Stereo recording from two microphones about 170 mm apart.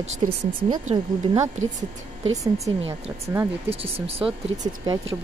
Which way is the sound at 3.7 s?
35° right (ahead or behind).